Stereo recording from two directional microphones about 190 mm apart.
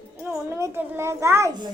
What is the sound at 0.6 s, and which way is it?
Speech, 15° right (ahead or behind).